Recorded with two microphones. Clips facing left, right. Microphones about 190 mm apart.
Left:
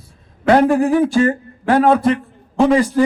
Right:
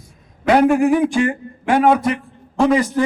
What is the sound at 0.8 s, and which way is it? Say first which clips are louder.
Speech: left 1 dB; 15° right (ahead or behind).